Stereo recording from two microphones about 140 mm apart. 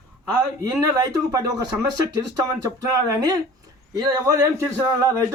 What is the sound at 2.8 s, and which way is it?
Speech, 25° right (ahead or behind).